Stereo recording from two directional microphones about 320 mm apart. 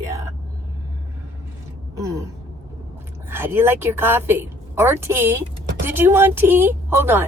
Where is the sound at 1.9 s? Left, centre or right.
Centre.